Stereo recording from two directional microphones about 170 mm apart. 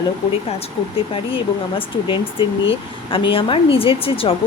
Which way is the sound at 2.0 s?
30° left (ahead or behind).